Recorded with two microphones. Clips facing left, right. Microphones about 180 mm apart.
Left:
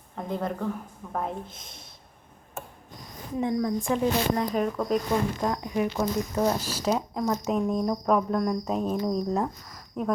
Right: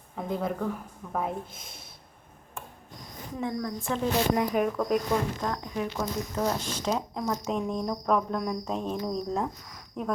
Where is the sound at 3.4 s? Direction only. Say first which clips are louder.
Left 5 dB; 15° left (ahead or behind).